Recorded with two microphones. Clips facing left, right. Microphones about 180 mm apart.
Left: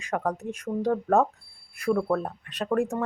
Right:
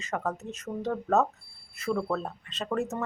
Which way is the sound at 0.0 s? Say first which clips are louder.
Left 4 dB; 15° left (ahead or behind).